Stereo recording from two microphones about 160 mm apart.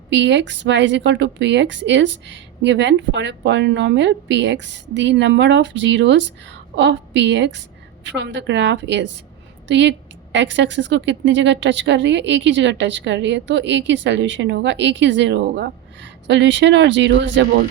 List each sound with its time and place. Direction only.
0.1 s a woman's voice: 90° right
10.6 s a woman's voice: 90° right